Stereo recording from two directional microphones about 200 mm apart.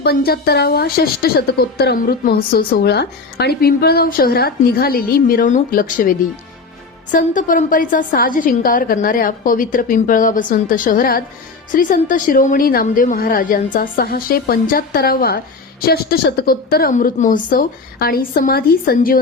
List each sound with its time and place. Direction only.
0.0 s a woman's voice: 50° left (ahead or behind)